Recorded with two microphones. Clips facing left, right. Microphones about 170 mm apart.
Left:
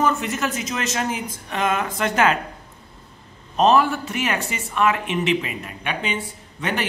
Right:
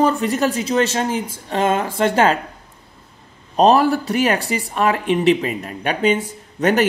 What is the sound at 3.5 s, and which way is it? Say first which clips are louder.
Speech: right 4 dB; 35° right (ahead or behind).